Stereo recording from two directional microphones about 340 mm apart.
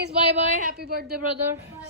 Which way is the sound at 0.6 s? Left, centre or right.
Right.